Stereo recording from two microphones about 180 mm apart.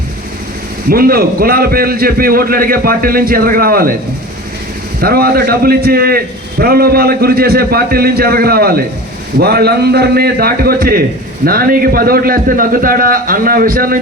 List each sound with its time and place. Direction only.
0.9 s a man's voice: 55° right (ahead or behind)
4.9 s a man's voice: 55° right (ahead or behind)